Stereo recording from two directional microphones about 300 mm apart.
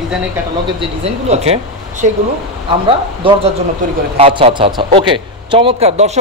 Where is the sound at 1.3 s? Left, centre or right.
Right.